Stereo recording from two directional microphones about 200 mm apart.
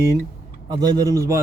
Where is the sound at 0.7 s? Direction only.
20° right (ahead or behind).